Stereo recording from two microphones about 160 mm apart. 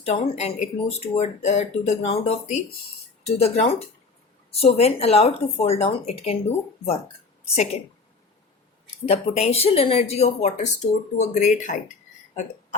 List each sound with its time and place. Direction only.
0.0 s speech: 40° left (ahead or behind)
7.5 s speech: 40° left (ahead or behind)
9.0 s speech: 40° left (ahead or behind)